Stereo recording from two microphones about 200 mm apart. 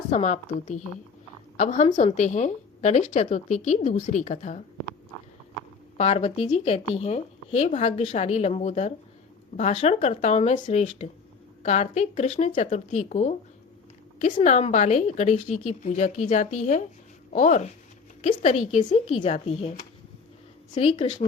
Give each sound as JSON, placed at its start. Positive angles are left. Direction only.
{"t": 0.1, "sound": "a woman's voice", "side_deg": 35}
{"t": 6.0, "sound": "a woman's voice", "side_deg": 30}
{"t": 14.3, "sound": "a woman's voice", "side_deg": 30}